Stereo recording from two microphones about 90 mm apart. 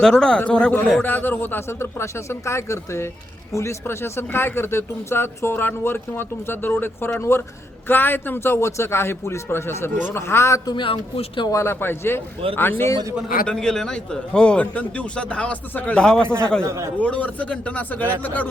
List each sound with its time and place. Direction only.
0.0 s a man's voice: 10° left (ahead or behind); by 10.6 s 30° left (ahead or behind)
10.7 s speech: 60° left (ahead or behind)
11.5 s speech: 30° left (ahead or behind)
13.5 s a man's voice: 5° left (ahead or behind)
16.6 s a man's voice: 35° right (ahead or behind)
17.0 s a man's voice: 15° left (ahead or behind)